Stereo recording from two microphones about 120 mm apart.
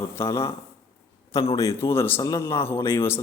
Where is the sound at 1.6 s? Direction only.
25° left (ahead or behind).